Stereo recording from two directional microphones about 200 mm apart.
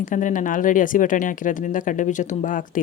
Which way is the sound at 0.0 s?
40° left (ahead or behind).